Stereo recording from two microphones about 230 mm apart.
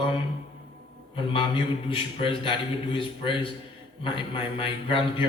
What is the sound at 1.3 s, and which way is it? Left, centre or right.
A man's voice, left.